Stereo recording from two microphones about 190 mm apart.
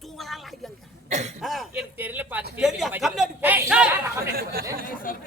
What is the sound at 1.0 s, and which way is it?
Cough, 35° right (ahead or behind).